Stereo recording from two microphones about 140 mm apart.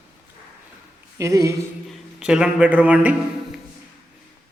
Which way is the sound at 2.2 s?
5° right (ahead or behind).